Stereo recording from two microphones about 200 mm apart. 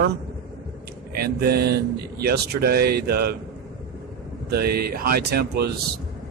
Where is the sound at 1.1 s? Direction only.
50° right (ahead or behind).